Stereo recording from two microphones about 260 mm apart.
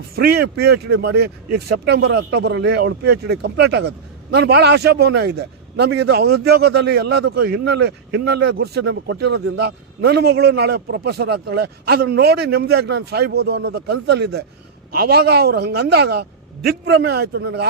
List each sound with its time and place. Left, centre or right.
0.2 s speech: right